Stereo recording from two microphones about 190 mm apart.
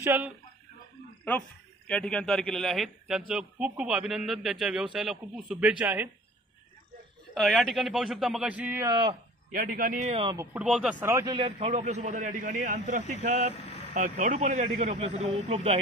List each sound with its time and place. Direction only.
0.0 s speech: 10° right (ahead or behind)
1.9 s a man's voice: 5° left (ahead or behind)
7.3 s a man's voice: centre (ahead or behind); by 9.1 s 20° right (ahead or behind)
9.5 s a man's voice: 45° right (ahead or behind)
10.3 s speech: 10° right (ahead or behind)
11.3 s speech: 30° right (ahead or behind)